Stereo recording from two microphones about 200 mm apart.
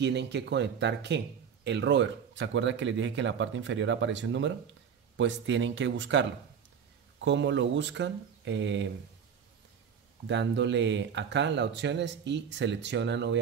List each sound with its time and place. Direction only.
0.0 s speech: 60° right (ahead or behind)
10.2 s speech: 65° right (ahead or behind)